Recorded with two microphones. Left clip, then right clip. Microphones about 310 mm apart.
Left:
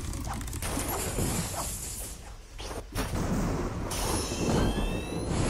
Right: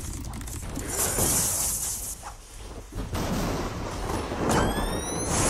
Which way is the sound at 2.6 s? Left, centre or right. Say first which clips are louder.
Left 5 dB; left.